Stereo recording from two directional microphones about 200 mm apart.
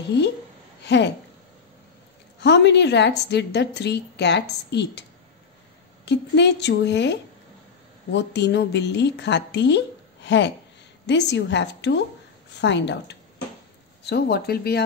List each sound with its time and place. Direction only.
0.8 s a woman's voice: 60° left (ahead or behind)
2.4 s a woman's voice: 60° left (ahead or behind)
6.0 s a woman's voice: 60° left (ahead or behind)